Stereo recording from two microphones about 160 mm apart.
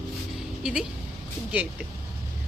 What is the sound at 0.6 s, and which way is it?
Speech, 5° right (ahead or behind).